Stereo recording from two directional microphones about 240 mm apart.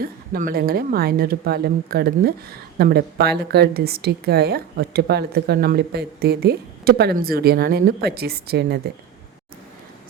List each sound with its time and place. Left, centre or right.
0.0 s speech: right